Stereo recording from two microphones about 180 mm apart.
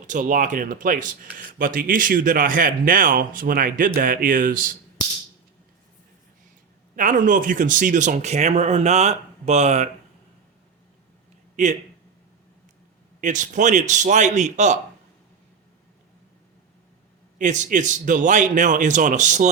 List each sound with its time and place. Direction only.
0.1 s speech: 45° right (ahead or behind)
6.9 s speech: 45° right (ahead or behind)
11.5 s a man's voice: 40° right (ahead or behind)
13.2 s speech: 45° right (ahead or behind)
17.3 s speech: 45° right (ahead or behind)